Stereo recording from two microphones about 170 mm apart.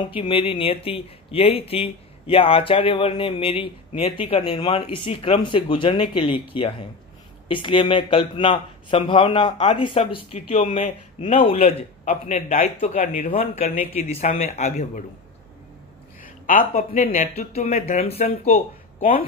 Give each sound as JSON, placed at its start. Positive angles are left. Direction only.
{"t": 0.0, "sound": "speech", "side_deg": 30}
{"t": 12.9, "sound": "speech", "side_deg": 55}
{"t": 13.3, "sound": "speech", "side_deg": 35}
{"t": 16.2, "sound": "speech", "side_deg": 50}